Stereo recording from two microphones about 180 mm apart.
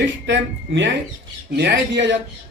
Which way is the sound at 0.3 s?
90° right.